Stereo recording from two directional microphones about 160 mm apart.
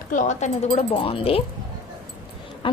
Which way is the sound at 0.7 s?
35° left (ahead or behind).